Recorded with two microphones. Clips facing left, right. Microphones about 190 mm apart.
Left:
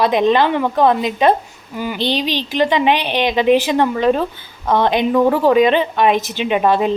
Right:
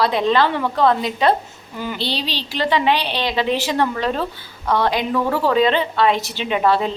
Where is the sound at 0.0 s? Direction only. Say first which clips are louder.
Left 3 dB; 20° left (ahead or behind).